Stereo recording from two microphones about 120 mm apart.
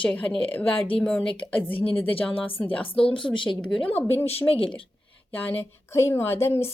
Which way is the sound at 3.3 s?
45° left (ahead or behind).